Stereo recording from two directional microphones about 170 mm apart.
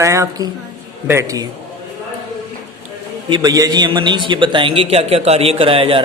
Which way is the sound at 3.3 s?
20° right (ahead or behind).